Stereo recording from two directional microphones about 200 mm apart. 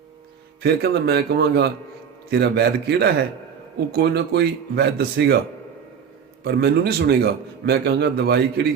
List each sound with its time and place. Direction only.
0.6 s a man's voice: 55° right (ahead or behind)
6.4 s a man's voice: 55° right (ahead or behind)